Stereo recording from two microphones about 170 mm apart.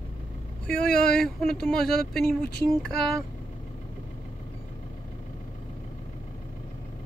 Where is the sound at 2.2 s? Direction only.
65° left (ahead or behind).